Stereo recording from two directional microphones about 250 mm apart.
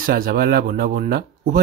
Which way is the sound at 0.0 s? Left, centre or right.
Right.